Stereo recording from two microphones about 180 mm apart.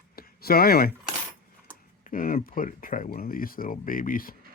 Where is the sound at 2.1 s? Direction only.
50° left (ahead or behind).